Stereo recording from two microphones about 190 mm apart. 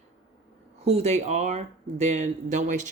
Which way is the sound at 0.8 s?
35° right (ahead or behind).